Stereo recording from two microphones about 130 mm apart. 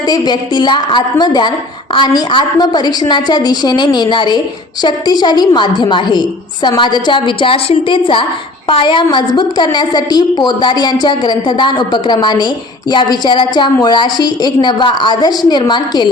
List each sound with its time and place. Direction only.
0.1 s a woman's voice: 35° left (ahead or behind)